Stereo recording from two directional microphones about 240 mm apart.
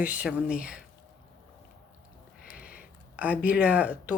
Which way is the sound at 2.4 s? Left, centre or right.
Left.